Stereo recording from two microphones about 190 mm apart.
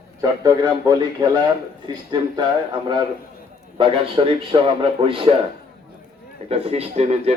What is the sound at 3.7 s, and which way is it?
A man's voice, 30° right (ahead or behind).